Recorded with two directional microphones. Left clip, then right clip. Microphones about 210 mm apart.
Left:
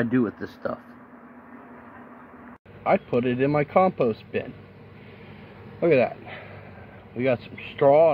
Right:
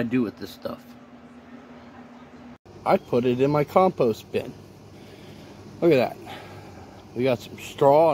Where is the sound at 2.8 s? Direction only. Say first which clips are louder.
Right 1 dB; 15° right (ahead or behind).